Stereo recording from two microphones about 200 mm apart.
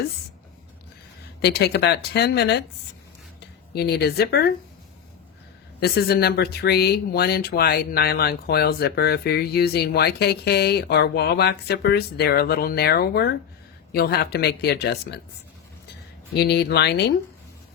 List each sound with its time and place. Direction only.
1.4 s speech: 55° left (ahead or behind)
3.7 s speech: 55° left (ahead or behind)
5.8 s speech: 50° left (ahead or behind)
16.3 s speech: 55° left (ahead or behind)